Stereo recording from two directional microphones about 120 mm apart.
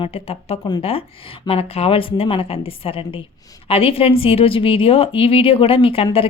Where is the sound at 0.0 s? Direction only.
55° left (ahead or behind).